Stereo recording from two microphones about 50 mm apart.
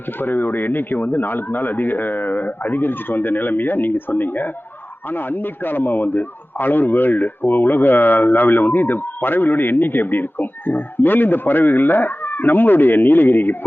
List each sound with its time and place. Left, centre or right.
0.2 s a man's voice: left